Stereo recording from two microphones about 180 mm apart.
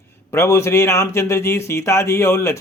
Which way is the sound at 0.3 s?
15° left (ahead or behind).